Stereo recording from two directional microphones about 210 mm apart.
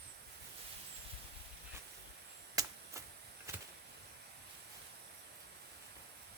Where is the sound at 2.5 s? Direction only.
15° right (ahead or behind).